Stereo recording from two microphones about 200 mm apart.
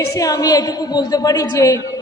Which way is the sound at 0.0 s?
15° left (ahead or behind).